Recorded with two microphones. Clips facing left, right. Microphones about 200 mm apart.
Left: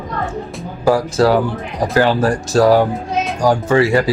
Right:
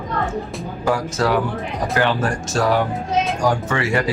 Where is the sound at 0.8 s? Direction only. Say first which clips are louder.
Left 7 dB; 35° left (ahead or behind).